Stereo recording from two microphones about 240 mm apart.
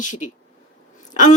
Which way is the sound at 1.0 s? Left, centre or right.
Left.